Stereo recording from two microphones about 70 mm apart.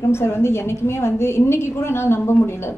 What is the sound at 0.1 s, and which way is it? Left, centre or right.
A woman's voice, left.